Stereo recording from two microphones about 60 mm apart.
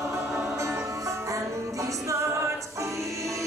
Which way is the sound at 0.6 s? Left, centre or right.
Right.